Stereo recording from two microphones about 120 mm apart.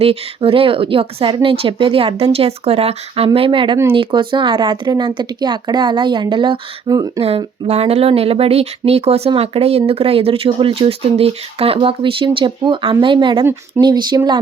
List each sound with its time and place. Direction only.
0.0 s speech: 50° right (ahead or behind); by 7.1 s 30° right (ahead or behind)
7.2 s speech: 60° right (ahead or behind); by 14.2 s 40° right (ahead or behind)